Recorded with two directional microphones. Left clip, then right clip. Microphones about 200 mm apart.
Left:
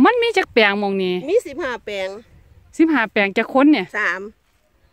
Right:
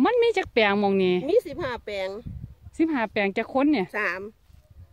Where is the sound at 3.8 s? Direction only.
45° left (ahead or behind).